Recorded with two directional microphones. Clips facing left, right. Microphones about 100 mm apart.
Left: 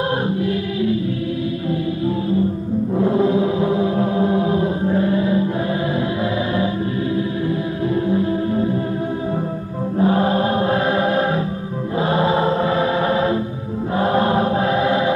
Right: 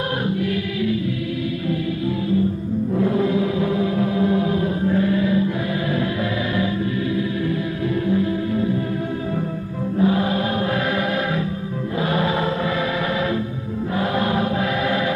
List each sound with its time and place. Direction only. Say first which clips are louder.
0.4 s choir: left 2 dB; 30° left (ahead or behind)
2.9 s chant: left 3 dB; 30° left (ahead or behind)
7.9 s music: left 2 dB; 30° left (ahead or behind)
9.9 s music: left 3 dB; 35° left (ahead or behind)
13.9 s choir: left 5 dB; 35° left (ahead or behind)